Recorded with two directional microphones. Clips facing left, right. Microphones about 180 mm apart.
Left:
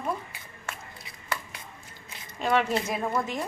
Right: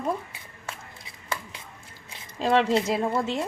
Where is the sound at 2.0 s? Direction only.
30° right (ahead or behind).